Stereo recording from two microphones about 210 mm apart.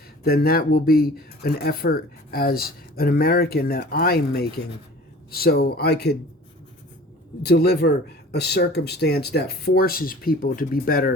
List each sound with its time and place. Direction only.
0.3 s speech: 45° left (ahead or behind)
7.4 s speech: 50° left (ahead or behind)